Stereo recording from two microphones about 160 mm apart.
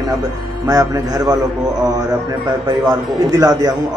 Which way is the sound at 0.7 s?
20° right (ahead or behind).